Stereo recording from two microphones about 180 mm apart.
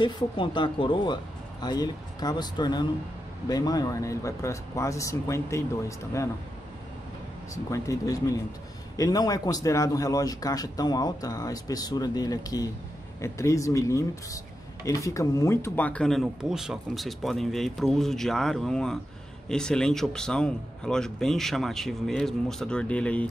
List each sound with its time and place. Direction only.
0.0 s speech: 25° left (ahead or behind)
7.5 s speech: 15° left (ahead or behind)